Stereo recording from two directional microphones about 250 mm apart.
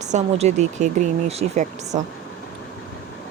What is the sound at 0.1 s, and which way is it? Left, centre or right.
Speech, right.